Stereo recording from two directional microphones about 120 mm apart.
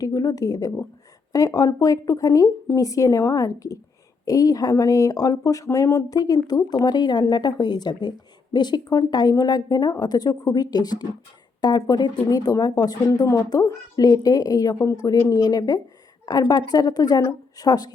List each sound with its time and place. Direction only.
0.0 s speech: 30° left (ahead or behind)